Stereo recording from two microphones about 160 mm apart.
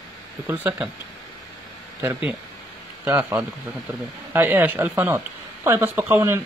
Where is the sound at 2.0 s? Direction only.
15° right (ahead or behind).